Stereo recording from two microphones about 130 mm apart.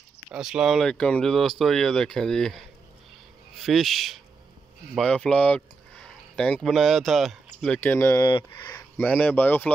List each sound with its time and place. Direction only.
0.3 s speech: 5° right (ahead or behind)
3.6 s speech: centre (ahead or behind)
7.8 s speech: 20° left (ahead or behind)
8.3 s speech: 35° left (ahead or behind)
8.7 s speech: 10° left (ahead or behind)